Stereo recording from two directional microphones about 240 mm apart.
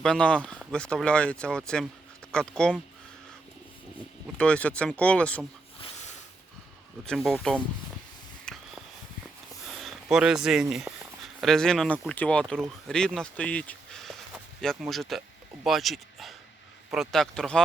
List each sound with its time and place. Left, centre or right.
0.0 s speech: centre
4.4 s speech: centre
7.0 s speech: centre
8.5 s a sound: centre
9.7 s speech: centre